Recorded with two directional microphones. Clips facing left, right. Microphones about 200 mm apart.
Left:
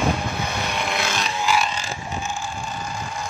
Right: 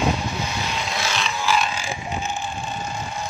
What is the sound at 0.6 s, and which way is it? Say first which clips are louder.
Vehicle: left 2 dB; 60° left (ahead or behind).